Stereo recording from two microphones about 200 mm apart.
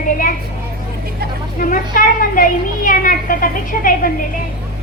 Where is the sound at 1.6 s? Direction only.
40° left (ahead or behind).